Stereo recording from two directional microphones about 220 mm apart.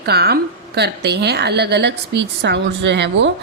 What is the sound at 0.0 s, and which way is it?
A woman's voice, 45° right (ahead or behind).